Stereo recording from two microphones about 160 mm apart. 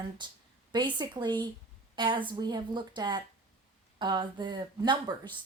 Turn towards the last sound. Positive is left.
turn(degrees=-25)  # may be behind; listen again after turning